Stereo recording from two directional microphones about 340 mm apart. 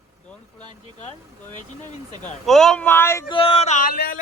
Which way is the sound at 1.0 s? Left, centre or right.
Left.